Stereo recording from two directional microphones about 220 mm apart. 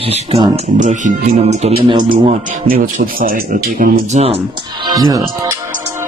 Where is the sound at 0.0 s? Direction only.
25° right (ahead or behind).